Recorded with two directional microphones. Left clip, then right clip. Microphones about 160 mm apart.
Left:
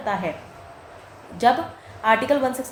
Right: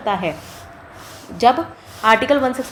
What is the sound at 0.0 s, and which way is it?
Speech, 35° right (ahead or behind).